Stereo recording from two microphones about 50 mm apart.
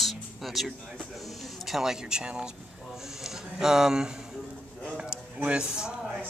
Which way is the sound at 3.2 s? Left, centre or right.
Centre.